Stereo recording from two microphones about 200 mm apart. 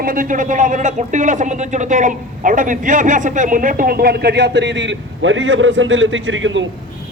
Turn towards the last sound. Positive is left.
turn(degrees=-70)  # may be behind; listen again after turning